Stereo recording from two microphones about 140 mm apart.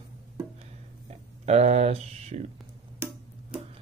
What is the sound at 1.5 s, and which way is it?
Speech, 50° right (ahead or behind).